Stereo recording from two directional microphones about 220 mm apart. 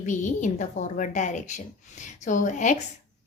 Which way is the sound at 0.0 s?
35° left (ahead or behind).